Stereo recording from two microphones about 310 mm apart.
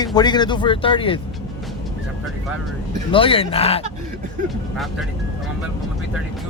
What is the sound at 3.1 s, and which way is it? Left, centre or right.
Speech, centre.